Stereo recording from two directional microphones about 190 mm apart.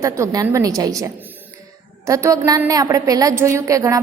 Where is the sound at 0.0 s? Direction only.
15° right (ahead or behind).